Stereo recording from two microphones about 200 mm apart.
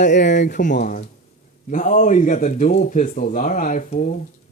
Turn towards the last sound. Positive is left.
turn(degrees=40)  # may be behind; listen again after turning